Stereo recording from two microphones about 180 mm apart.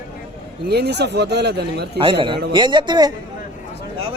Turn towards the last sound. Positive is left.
turn(degrees=-25)  # may be behind; listen again after turning